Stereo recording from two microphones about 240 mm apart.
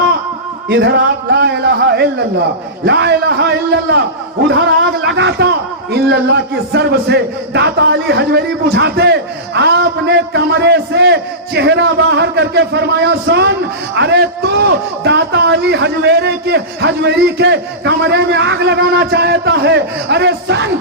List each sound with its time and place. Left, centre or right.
0.7 s a man's voice: right
4.5 s a man's voice: right